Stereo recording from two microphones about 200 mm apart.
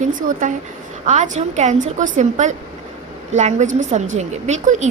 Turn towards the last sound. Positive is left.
turn(degrees=-35)  # may be behind; listen again after turning